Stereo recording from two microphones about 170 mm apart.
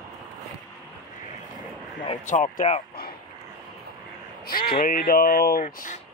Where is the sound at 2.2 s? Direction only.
50° left (ahead or behind).